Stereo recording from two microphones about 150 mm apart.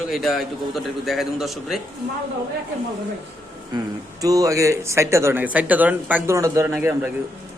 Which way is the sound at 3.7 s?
25° right (ahead or behind).